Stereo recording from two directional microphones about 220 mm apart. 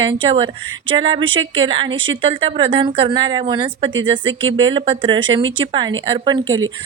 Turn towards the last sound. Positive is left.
turn(degrees=-60)  # may be behind; listen again after turning